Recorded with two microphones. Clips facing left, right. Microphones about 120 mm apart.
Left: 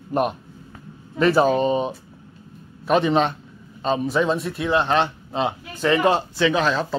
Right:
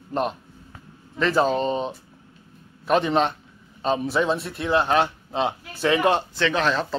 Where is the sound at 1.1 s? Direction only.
10° left (ahead or behind).